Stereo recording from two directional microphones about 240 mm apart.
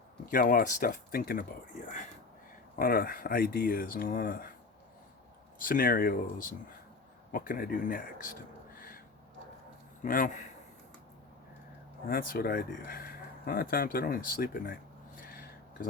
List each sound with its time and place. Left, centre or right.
0.3 s speech: left
2.7 s speech: left
5.6 s speech: left
10.0 s speech: left
12.0 s speech: left
15.3 s a sound: left